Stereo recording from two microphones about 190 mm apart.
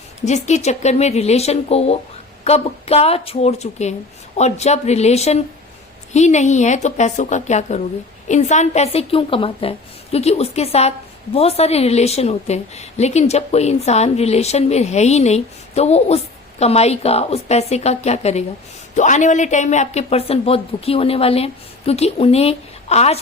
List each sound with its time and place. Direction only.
0.2 s a woman's voice: 35° left (ahead or behind)